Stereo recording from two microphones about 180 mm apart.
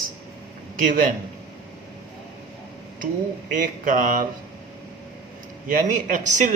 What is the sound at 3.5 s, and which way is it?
Speech, 50° right (ahead or behind).